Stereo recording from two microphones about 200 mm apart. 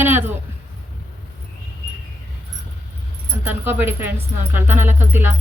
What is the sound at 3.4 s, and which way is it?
Speech, 10° right (ahead or behind).